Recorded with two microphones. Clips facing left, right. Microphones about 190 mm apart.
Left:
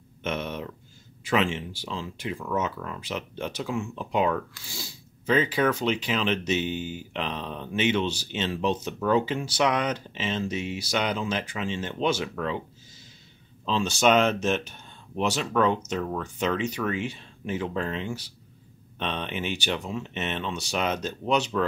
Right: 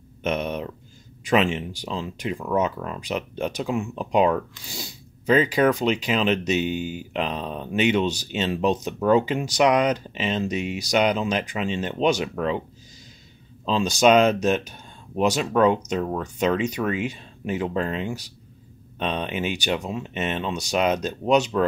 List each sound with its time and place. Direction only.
0.3 s speech: 15° right (ahead or behind)
13.8 s speech: 15° right (ahead or behind)